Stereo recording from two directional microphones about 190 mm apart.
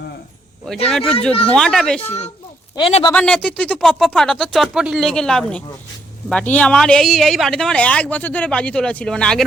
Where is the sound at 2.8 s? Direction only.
30° left (ahead or behind).